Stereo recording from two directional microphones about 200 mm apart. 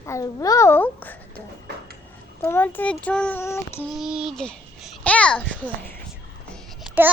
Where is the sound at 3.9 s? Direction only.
5° right (ahead or behind).